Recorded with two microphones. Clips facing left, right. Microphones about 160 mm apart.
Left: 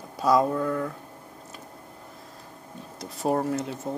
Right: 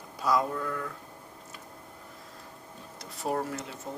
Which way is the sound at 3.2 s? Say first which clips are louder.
Left 6 dB; 35° left (ahead or behind).